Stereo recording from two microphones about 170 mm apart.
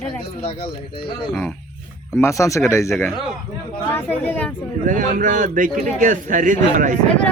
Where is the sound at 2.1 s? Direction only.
15° left (ahead or behind).